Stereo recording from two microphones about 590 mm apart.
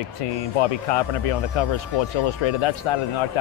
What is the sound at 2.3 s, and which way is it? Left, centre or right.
Speech, left.